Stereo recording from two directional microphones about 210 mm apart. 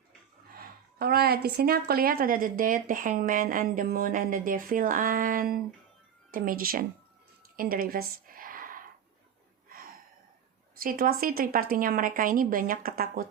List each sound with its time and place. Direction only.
0.6 s a woman's voice: 45° right (ahead or behind)
7.5 s a sound: 45° right (ahead or behind)
10.8 s a woman's voice: 45° right (ahead or behind)